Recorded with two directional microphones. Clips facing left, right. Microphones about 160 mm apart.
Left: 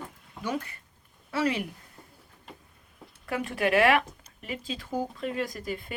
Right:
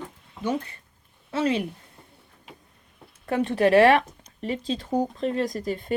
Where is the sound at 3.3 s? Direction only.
30° right (ahead or behind).